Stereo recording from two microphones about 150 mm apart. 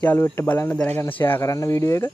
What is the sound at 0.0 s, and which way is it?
Speech, 15° left (ahead or behind).